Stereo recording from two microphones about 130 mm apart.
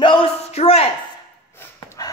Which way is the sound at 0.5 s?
50° left (ahead or behind).